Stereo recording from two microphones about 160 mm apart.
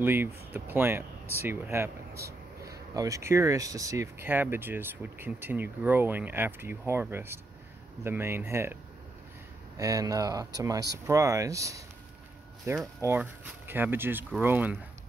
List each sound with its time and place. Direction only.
0.0 s speech: 15° right (ahead or behind)
9.8 s speech: 20° right (ahead or behind)